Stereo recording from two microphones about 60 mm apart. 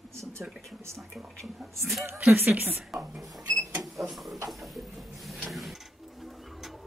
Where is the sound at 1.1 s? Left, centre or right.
Centre.